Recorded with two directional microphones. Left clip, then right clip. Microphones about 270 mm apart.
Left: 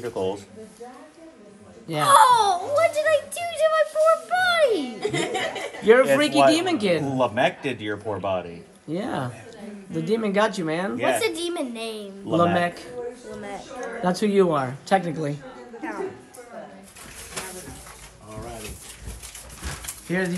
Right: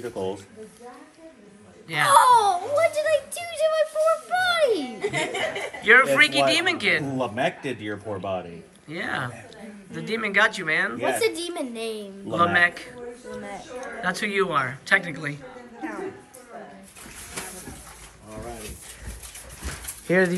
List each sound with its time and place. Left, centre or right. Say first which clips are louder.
0.0 s speech: left 3 dB; centre
2.0 s speech: left 1 dB; centre
6.1 s a woman's voice: left 1 dB; centre
7.0 s speech: left 4 dB; centre
8.8 s a woman's voice: even; centre
11.0 s speech: left 1 dB; centre
12.5 s a woman's voice: right 4 dB; centre
13.3 s speech: left 1 dB; centre
14.0 s a woman's voice: left 4 dB; centre
18.3 s a sound: even; centre